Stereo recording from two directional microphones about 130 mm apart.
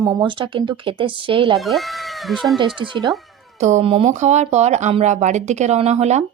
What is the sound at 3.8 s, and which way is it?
Speech, 45° right (ahead or behind).